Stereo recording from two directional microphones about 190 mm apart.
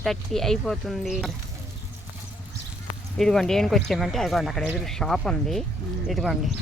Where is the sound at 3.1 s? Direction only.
Centre (ahead or behind).